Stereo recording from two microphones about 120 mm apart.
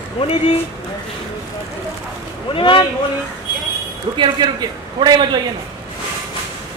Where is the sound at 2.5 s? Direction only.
45° left (ahead or behind).